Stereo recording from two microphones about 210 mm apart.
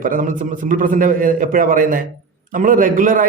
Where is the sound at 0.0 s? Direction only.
40° right (ahead or behind).